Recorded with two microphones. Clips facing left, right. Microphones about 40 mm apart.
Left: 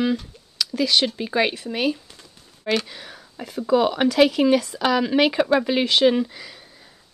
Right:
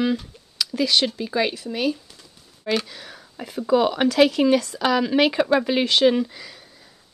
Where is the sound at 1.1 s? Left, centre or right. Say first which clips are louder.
Left 1 dB; left.